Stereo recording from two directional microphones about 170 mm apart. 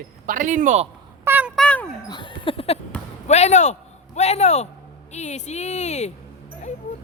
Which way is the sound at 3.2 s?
40° left (ahead or behind).